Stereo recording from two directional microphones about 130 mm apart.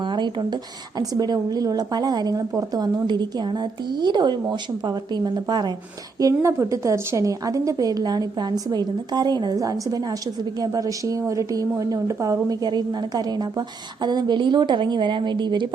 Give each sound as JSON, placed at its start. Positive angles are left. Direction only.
{"t": 0.0, "sound": "a woman's voice", "side_deg": -35}